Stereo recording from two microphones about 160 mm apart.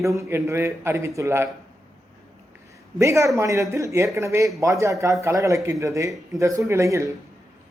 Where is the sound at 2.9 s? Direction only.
20° right (ahead or behind).